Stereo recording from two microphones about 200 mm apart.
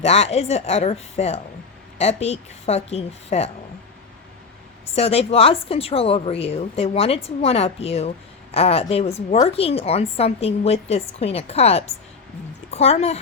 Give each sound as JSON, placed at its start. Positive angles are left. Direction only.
{"t": 0.0, "sound": "a woman's voice", "side_deg": 30}
{"t": 4.9, "sound": "a woman's voice", "side_deg": 30}